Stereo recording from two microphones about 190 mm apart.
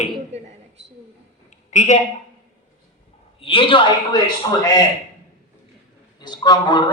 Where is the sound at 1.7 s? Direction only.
40° left (ahead or behind).